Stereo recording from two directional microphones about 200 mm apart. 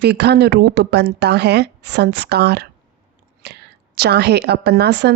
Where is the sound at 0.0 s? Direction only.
55° right (ahead or behind).